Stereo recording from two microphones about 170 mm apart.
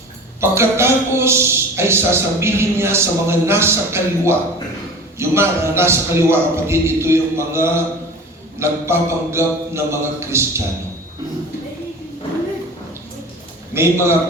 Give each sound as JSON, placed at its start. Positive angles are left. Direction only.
{"t": 0.4, "sound": "a man's voice", "side_deg": -15}
{"t": 13.7, "sound": "a man's voice", "side_deg": -15}